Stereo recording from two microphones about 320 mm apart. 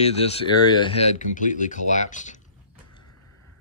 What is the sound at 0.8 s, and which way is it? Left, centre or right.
Speech, left.